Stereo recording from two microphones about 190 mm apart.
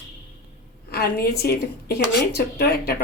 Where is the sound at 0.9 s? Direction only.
55° left (ahead or behind).